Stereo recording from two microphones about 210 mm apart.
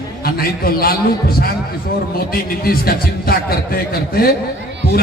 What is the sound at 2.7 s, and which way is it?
A man's voice, 45° left (ahead or behind).